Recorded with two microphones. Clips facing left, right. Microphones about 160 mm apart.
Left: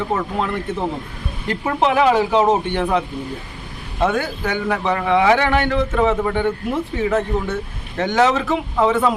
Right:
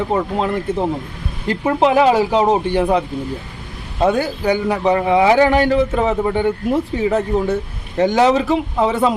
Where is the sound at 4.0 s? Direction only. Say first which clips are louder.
Right 3 dB; 35° right (ahead or behind).